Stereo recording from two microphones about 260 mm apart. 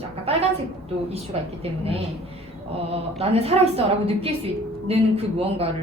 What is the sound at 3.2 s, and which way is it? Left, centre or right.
A woman's voice, right.